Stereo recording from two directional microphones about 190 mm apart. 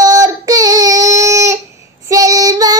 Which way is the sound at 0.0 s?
20° right (ahead or behind).